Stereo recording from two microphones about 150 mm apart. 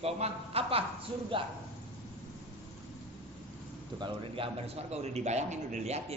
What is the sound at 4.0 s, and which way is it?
A woman's voice, 35° right (ahead or behind).